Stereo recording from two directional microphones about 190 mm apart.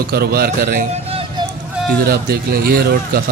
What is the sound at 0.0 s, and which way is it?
Speech, 55° right (ahead or behind).